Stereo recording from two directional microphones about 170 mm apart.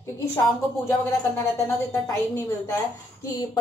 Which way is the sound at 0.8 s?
15° left (ahead or behind).